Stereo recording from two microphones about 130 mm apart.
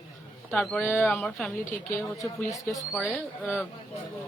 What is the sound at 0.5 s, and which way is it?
Speech, 5° left (ahead or behind).